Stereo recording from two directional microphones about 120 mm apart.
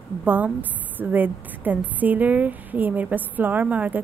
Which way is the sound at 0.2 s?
15° right (ahead or behind).